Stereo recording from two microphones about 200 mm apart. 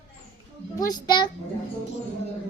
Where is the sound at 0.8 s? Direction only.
20° left (ahead or behind).